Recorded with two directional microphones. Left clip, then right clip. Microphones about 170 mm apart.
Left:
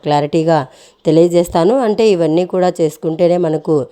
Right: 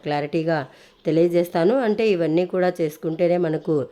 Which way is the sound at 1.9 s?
35° left (ahead or behind).